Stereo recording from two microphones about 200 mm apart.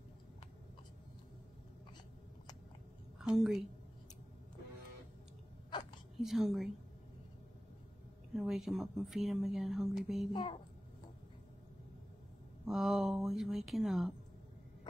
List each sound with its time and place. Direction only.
3.2 s a woman's voice: centre (ahead or behind)
5.7 s hiccup: 25° left (ahead or behind)
6.1 s speech: centre (ahead or behind)
8.4 s speech: centre (ahead or behind)
12.6 s speech: centre (ahead or behind)